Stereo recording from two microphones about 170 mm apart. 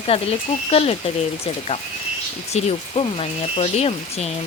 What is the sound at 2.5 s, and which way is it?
Speech, 35° left (ahead or behind).